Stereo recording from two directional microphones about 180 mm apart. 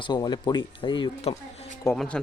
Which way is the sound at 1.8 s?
5° left (ahead or behind).